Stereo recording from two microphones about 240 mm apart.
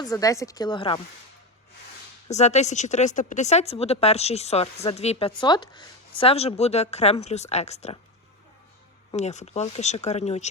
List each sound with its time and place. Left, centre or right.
0.0 s speech: centre
2.2 s speech: left
9.1 s speech: left